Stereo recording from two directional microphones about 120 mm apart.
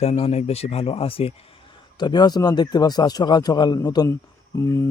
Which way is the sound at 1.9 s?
35° left (ahead or behind).